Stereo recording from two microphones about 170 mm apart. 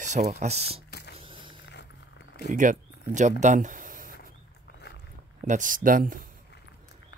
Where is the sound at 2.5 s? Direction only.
50° right (ahead or behind).